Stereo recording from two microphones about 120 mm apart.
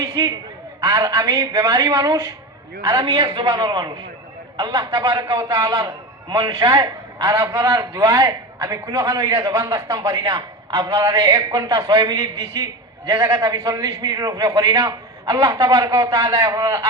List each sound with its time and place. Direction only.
0.0 s a sound: 30° right (ahead or behind)
0.9 s a woman's voice: 25° right (ahead or behind)
2.8 s a man's voice: 45° right (ahead or behind)
5.4 s a woman's voice: 30° right (ahead or behind)